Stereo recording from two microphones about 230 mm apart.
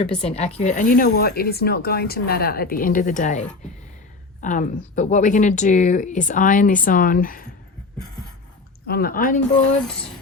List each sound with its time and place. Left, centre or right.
0.2 s speech: left
8.9 s speech: left